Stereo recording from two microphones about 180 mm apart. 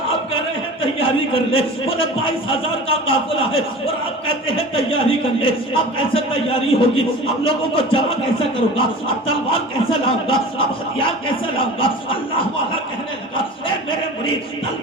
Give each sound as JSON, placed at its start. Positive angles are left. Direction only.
{"t": 0.8, "sound": "speech", "side_deg": 30}
{"t": 4.3, "sound": "speech", "side_deg": 30}